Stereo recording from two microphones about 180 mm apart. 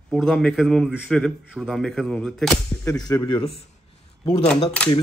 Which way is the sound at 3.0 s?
25° left (ahead or behind).